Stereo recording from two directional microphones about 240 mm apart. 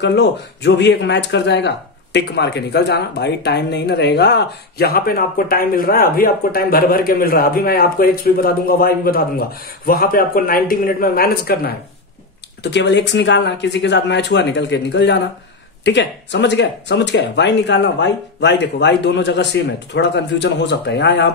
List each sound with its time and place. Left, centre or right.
0.0 s speech: left